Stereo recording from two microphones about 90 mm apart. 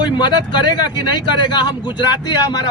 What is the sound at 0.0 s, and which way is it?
Speech, 55° left (ahead or behind).